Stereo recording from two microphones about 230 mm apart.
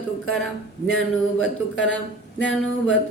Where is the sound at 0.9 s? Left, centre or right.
Left.